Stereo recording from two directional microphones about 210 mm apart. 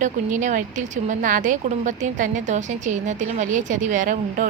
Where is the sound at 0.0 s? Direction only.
35° right (ahead or behind).